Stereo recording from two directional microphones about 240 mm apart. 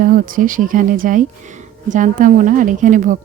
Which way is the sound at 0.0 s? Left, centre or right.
Right.